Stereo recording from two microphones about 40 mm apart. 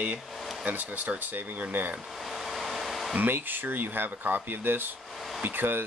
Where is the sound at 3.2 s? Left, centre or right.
Right.